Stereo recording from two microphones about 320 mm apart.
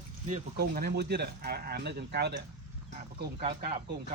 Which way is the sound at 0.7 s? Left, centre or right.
Right.